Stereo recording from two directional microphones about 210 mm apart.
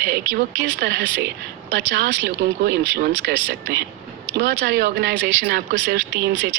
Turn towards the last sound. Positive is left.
turn(degrees=-55)  # may be behind; listen again after turning